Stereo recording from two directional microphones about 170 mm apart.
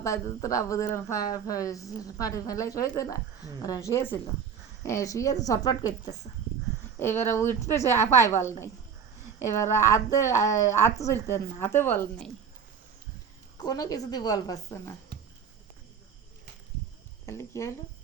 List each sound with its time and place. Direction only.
0.0 s a woman's voice: 20° left (ahead or behind)
13.6 s speech: 20° left (ahead or behind)
17.2 s a woman's voice: 15° left (ahead or behind)